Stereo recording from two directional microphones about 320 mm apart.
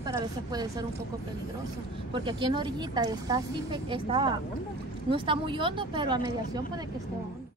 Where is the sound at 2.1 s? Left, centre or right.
Centre.